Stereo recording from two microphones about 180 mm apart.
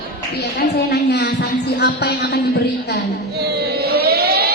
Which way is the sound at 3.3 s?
65° right (ahead or behind).